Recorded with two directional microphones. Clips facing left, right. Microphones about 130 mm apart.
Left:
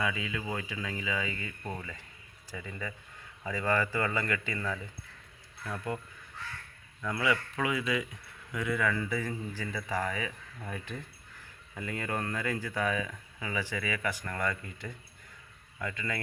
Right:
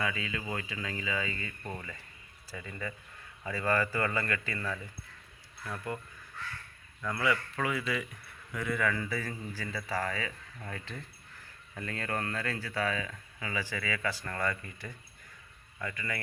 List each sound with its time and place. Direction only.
0.0 s speech: 15° left (ahead or behind)
7.1 s a man's voice: 20° left (ahead or behind)